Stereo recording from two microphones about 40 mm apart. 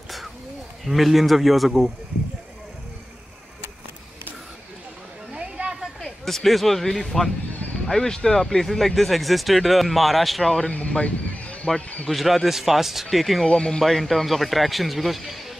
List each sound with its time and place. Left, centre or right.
0.8 s speech: centre
5.3 s a sound: right
6.2 s speech: centre
10.7 s a sound: left
12.1 s speech: centre
13.5 s speech: left
13.7 s speech: centre